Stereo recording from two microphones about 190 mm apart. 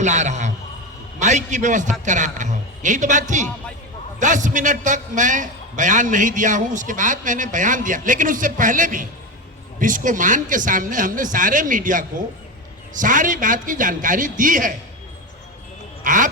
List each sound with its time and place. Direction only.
0.0 s a man's voice: 40° right (ahead or behind)
16.0 s a man's voice: 45° right (ahead or behind)